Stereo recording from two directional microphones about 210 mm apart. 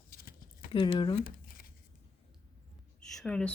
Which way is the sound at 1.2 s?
45° left (ahead or behind).